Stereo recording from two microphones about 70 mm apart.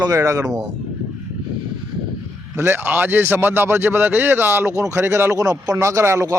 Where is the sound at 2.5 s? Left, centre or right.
Right.